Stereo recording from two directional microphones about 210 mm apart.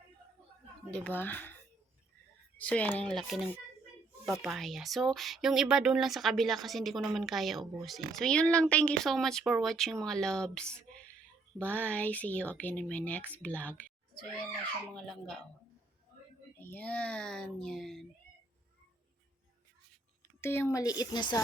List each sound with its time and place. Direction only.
0.9 s speech: 5° left (ahead or behind)
2.6 s a child's voice: 5° left (ahead or behind)
16.6 s speech: 10° left (ahead or behind)
20.4 s speech: 10° left (ahead or behind)